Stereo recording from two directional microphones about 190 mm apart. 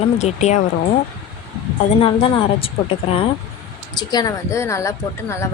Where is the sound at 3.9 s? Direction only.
20° left (ahead or behind).